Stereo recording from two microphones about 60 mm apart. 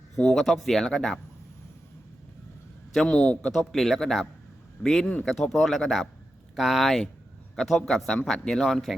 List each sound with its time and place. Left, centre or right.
0.3 s speech: centre
2.9 s a man's voice: centre